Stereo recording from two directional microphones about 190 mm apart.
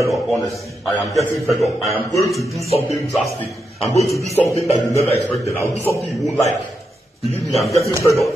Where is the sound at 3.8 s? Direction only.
35° left (ahead or behind).